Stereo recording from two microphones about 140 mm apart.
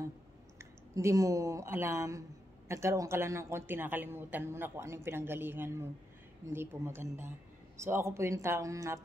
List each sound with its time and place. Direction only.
0.6 s a woman's voice: 20° right (ahead or behind)